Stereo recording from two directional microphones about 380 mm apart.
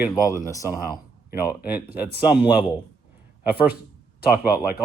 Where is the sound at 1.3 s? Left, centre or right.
Centre.